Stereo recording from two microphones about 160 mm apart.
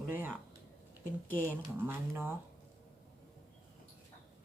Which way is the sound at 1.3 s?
10° left (ahead or behind).